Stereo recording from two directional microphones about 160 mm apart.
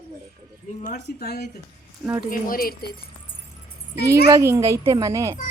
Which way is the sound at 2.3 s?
65° left (ahead or behind).